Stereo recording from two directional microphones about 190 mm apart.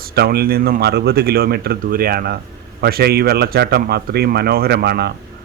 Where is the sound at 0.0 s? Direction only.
55° right (ahead or behind).